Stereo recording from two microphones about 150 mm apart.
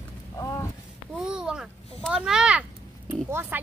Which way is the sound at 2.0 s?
Centre (ahead or behind).